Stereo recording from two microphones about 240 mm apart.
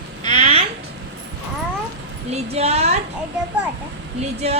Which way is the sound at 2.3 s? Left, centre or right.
Right.